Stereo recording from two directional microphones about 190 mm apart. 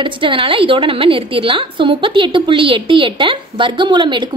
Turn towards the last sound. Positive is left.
turn(degrees=-25)  # may be behind; listen again after turning